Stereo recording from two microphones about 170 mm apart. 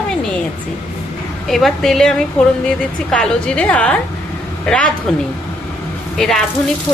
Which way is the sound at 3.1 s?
5° left (ahead or behind).